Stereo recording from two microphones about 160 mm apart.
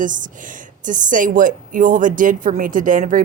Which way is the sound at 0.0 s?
55° right (ahead or behind).